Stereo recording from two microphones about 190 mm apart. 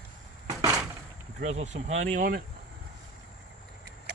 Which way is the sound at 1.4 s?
35° right (ahead or behind).